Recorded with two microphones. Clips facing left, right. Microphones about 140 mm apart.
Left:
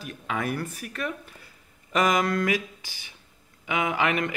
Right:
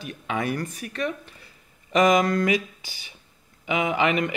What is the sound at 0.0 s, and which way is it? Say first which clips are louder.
Speech: right 2 dB; centre (ahead or behind).